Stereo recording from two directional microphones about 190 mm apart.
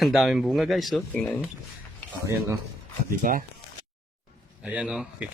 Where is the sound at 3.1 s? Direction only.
50° right (ahead or behind).